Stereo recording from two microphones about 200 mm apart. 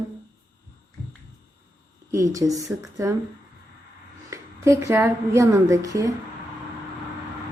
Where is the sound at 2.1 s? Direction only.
15° right (ahead or behind).